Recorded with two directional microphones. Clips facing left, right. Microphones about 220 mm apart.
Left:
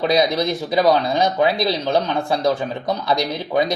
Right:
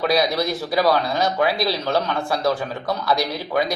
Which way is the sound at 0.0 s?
20° left (ahead or behind).